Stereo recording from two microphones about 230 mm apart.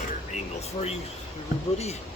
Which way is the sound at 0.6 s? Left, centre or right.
Left.